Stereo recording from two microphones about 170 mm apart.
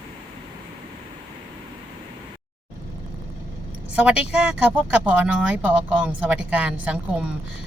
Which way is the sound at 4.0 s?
5° right (ahead or behind).